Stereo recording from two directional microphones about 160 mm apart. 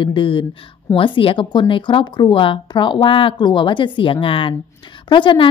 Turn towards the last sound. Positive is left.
turn(degrees=30)  # may be behind; listen again after turning